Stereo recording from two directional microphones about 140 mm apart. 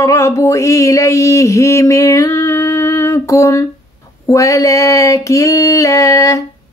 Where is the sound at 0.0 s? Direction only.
20° left (ahead or behind).